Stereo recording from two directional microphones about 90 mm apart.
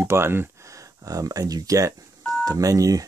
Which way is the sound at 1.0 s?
45° right (ahead or behind).